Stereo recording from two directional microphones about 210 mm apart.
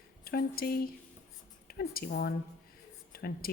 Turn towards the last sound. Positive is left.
turn(degrees=45)  # may be behind; listen again after turning